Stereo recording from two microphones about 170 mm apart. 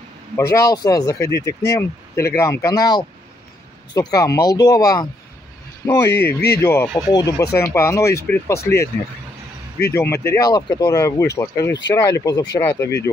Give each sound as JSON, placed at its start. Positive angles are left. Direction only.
{"t": 0.4, "sound": "speech", "side_deg": 20}
{"t": 6.1, "sound": "speech", "side_deg": 70}
{"t": 6.6, "sound": "speech", "side_deg": 15}
{"t": 9.9, "sound": "speech", "side_deg": 15}